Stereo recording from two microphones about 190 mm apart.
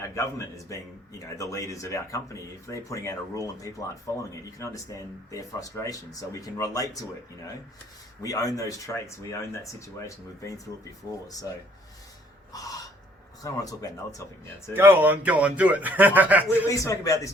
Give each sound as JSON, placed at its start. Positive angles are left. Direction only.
{"t": 0.2, "sound": "speech", "side_deg": 15}
{"t": 8.2, "sound": "speech", "side_deg": 20}
{"t": 11.1, "sound": "speech", "side_deg": 15}
{"t": 12.5, "sound": "throat clearing", "side_deg": 20}
{"t": 13.4, "sound": "speech", "side_deg": 20}
{"t": 14.7, "sound": "speech", "side_deg": -10}
{"t": 16.6, "sound": "speech", "side_deg": 15}